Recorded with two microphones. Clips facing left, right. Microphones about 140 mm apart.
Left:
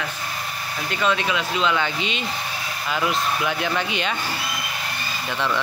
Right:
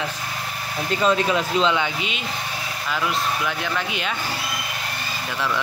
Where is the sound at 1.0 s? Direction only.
35° right (ahead or behind).